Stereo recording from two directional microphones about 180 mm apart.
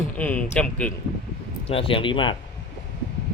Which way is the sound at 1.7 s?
30° left (ahead or behind).